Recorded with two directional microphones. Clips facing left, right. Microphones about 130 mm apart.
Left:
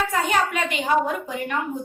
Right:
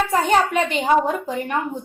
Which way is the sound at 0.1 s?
35° right (ahead or behind).